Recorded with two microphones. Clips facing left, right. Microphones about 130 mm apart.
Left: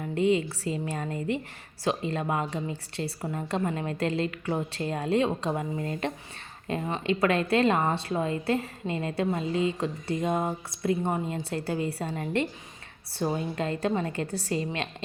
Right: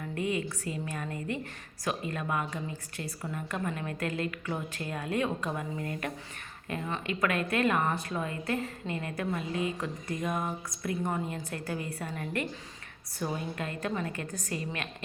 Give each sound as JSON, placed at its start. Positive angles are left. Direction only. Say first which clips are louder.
{"t": 0.0, "sound": "a woman's voice", "louder": "left 7 dB", "side_deg": 25}